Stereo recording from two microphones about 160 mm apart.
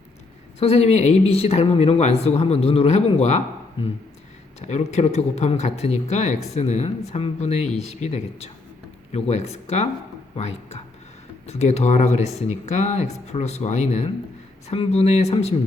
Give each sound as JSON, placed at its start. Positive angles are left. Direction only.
{"t": 0.6, "sound": "speech", "side_deg": 40}
{"t": 10.3, "sound": "a sound", "side_deg": 40}
{"t": 11.4, "sound": "speech", "side_deg": 45}